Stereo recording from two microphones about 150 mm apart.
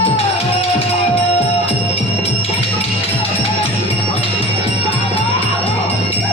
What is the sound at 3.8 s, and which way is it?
Music, 40° left (ahead or behind).